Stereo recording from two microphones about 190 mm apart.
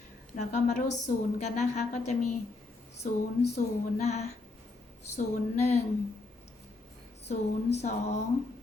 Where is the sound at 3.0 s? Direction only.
40° left (ahead or behind).